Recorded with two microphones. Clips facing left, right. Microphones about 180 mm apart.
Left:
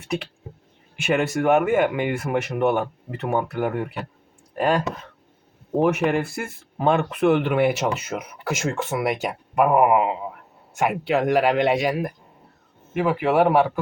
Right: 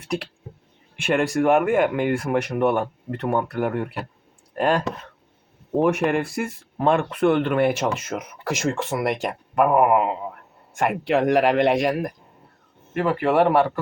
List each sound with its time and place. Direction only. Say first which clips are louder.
1.0 s speech: right 1 dB; centre (ahead or behind)